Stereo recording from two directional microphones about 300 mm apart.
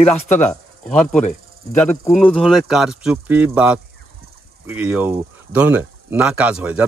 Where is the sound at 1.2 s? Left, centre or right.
Left.